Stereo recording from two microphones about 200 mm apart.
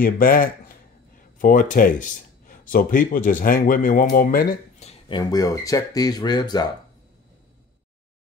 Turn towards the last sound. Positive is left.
turn(degrees=20)  # may be behind; listen again after turning